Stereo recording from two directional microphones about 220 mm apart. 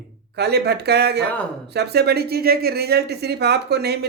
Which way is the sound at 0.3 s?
50° right (ahead or behind).